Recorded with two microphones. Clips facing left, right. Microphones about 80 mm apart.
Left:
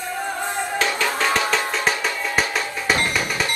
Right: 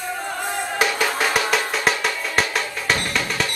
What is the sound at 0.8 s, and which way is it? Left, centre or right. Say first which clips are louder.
Music: right 2 dB; centre.